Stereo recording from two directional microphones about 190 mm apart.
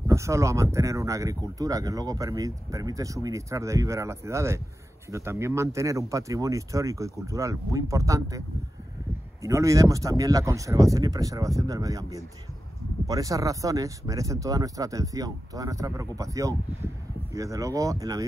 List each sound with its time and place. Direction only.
0.1 s speech: 15° right (ahead or behind)